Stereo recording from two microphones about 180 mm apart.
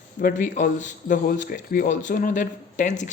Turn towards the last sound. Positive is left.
turn(degrees=45)  # may be behind; listen again after turning